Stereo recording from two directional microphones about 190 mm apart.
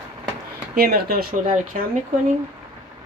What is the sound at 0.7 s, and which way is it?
Speech, 55° right (ahead or behind).